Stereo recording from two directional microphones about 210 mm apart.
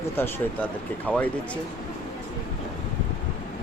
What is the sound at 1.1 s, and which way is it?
Speech, 5° left (ahead or behind).